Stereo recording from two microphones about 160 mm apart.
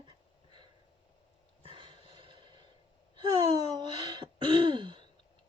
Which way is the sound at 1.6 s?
30° right (ahead or behind).